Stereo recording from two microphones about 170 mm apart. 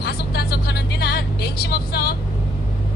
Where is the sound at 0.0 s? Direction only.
70° left (ahead or behind).